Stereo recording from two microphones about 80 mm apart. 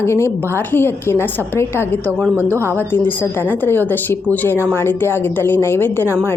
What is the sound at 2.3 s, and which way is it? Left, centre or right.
Speech, right.